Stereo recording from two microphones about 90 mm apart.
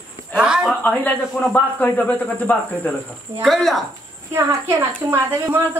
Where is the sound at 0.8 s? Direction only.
20° left (ahead or behind).